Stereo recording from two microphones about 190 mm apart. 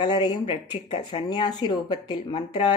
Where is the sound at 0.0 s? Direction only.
25° left (ahead or behind).